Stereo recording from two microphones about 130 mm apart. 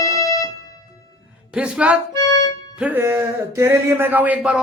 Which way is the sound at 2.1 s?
20° left (ahead or behind).